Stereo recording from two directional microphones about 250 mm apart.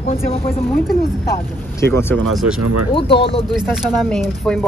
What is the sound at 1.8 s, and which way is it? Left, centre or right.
Speech, centre.